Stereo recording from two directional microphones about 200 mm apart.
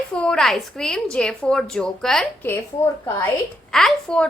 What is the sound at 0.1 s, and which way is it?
A woman's voice, 5° left (ahead or behind).